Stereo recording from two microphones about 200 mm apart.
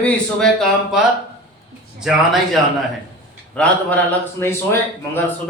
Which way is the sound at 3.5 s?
5° left (ahead or behind).